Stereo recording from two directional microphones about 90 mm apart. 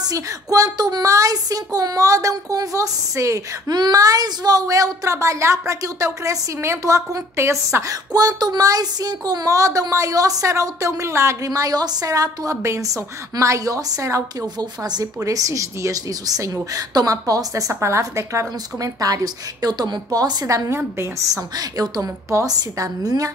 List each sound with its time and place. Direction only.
0.0 s speech: 40° right (ahead or behind)
14.6 s speech: 50° right (ahead or behind)